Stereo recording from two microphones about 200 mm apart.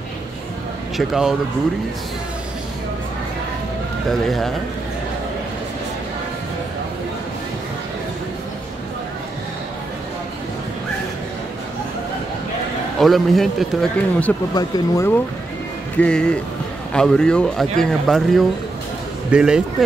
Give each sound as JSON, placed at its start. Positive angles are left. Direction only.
{"t": 0.9, "sound": "speech", "side_deg": 0}
{"t": 4.1, "sound": "speech", "side_deg": 0}
{"t": 13.0, "sound": "speech", "side_deg": 0}
{"t": 14.5, "sound": "speech", "side_deg": 15}
{"t": 16.0, "sound": "speech", "side_deg": 5}